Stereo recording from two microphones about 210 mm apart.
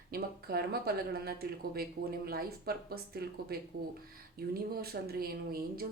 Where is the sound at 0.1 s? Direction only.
45° right (ahead or behind).